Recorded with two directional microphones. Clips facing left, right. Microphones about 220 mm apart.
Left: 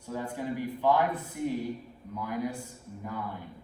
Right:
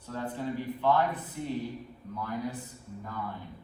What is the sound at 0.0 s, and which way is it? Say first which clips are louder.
Speech: even; 10° left (ahead or behind).